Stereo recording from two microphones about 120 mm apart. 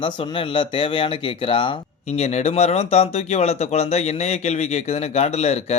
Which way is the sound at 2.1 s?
65° left (ahead or behind).